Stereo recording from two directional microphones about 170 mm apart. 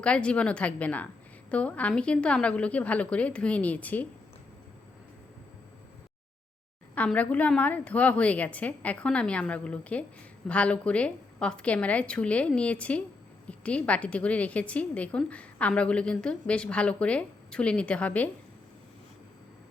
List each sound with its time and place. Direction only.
0.0 s a woman's voice: 5° left (ahead or behind)
6.9 s a woman's voice: 10° left (ahead or behind)